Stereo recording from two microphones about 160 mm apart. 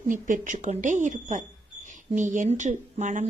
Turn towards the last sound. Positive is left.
turn(degrees=-50)  # may be behind; listen again after turning